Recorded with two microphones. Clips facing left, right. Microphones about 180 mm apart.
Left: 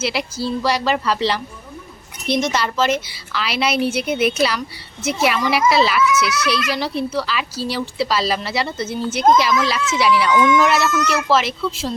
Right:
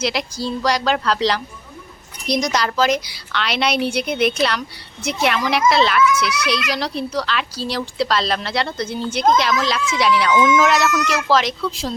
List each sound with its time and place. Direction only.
0.0 s speech: 5° left (ahead or behind)